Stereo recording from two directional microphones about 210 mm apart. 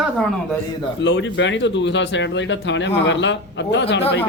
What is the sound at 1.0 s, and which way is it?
Speech, 60° left (ahead or behind).